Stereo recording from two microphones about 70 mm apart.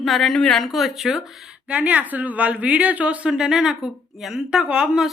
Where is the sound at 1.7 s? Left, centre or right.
Right.